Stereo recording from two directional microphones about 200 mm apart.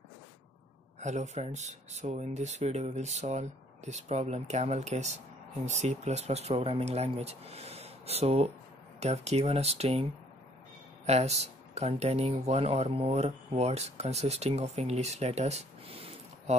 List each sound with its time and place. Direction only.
1.0 s speech: 35° right (ahead or behind)
11.1 s speech: 35° right (ahead or behind)